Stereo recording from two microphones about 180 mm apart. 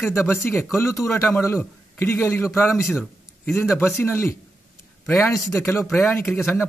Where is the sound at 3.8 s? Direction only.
15° left (ahead or behind).